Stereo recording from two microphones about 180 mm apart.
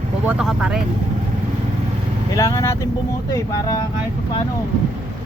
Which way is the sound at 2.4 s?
15° left (ahead or behind).